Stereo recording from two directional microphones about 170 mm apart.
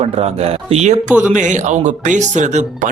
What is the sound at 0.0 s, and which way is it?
Speech, 35° right (ahead or behind).